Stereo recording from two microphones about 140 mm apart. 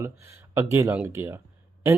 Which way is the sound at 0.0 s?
20° right (ahead or behind).